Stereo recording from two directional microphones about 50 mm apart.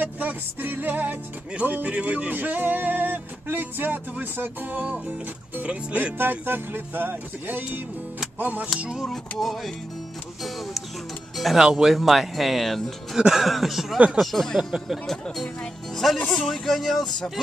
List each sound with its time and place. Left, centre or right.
0.0 s music: right
6.1 s speech: right
8.4 s music: right
9.4 s speech: centre
10.4 s music: centre
11.5 s speech: centre
14.6 s speech: centre
15.4 s speech: centre